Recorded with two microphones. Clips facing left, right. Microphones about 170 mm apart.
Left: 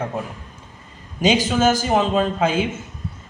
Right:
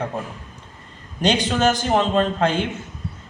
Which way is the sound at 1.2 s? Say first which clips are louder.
Left 2 dB; 5° left (ahead or behind).